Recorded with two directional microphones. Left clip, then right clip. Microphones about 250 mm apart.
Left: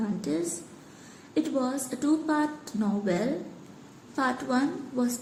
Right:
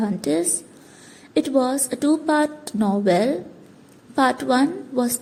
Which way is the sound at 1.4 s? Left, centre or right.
Right.